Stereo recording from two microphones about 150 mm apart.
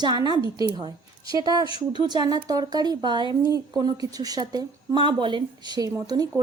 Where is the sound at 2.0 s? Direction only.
25° right (ahead or behind).